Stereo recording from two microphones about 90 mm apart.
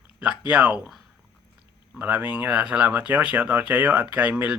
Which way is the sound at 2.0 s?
20° right (ahead or behind).